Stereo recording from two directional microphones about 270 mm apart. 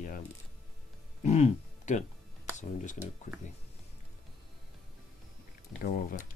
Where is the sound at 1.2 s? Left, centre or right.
Left.